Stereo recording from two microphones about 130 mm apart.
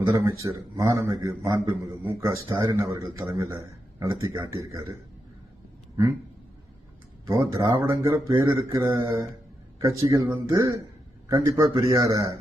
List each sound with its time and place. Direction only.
0.0 s a man's voice: 25° right (ahead or behind)
7.3 s a man's voice: 30° right (ahead or behind)